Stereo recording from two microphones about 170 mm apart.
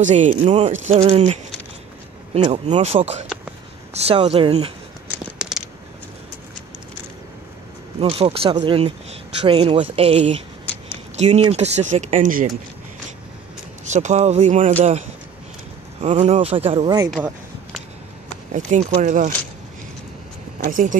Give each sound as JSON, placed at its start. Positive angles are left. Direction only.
{"t": 0.0, "sound": "speech", "side_deg": -45}
{"t": 2.3, "sound": "speech", "side_deg": -40}
{"t": 8.0, "sound": "speech", "side_deg": -35}
{"t": 10.6, "sound": "a sound", "side_deg": 10}
{"t": 11.1, "sound": "speech", "side_deg": -40}
{"t": 13.8, "sound": "speech", "side_deg": -45}
{"t": 18.5, "sound": "speech", "side_deg": -45}
{"t": 20.6, "sound": "speech", "side_deg": -50}